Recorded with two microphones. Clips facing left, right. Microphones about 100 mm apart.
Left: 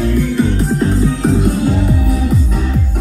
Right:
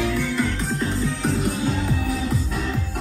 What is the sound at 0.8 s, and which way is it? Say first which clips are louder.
Music: left 9 dB; 35° left (ahead or behind).